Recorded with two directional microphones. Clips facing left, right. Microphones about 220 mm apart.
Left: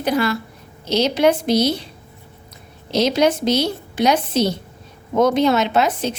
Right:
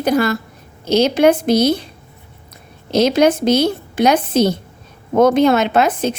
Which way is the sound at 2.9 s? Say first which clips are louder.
Right 4 dB; 50° right (ahead or behind).